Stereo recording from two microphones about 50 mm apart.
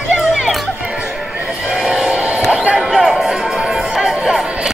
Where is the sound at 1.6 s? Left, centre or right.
Centre.